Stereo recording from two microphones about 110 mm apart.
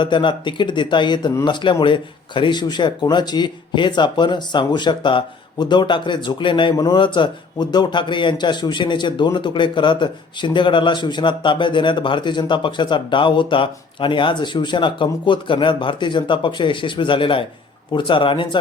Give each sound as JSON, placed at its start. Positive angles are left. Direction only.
{"t": 0.0, "sound": "speech", "side_deg": 45}